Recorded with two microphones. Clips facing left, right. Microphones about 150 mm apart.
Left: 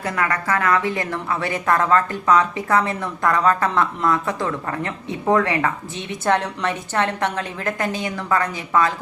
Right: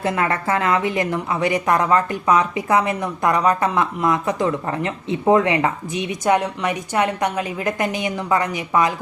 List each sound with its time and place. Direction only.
0.0 s a woman's voice: 25° right (ahead or behind)